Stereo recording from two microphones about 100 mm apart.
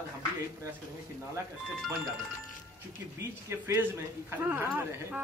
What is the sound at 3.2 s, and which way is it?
Speech, 25° right (ahead or behind).